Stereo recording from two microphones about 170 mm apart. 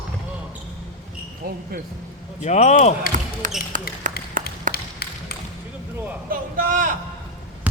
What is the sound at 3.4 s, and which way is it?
Speech, 50° right (ahead or behind).